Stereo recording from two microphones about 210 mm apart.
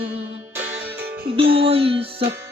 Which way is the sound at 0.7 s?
60° right (ahead or behind).